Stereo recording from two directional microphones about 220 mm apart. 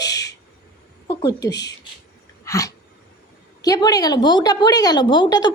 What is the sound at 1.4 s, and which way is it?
Speech, 50° left (ahead or behind).